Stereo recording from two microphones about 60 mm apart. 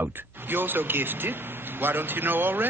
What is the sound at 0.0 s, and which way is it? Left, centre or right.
Speech, right.